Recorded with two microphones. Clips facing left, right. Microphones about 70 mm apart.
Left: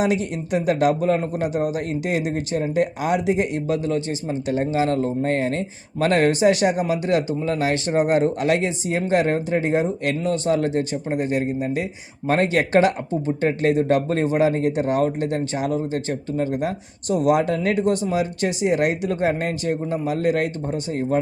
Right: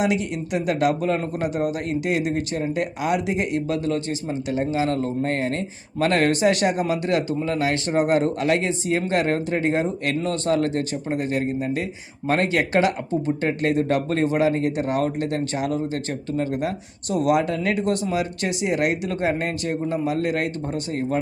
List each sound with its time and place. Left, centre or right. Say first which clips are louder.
0.0 s speech: left 1 dB; left
17.8 s speech: left 2 dB; left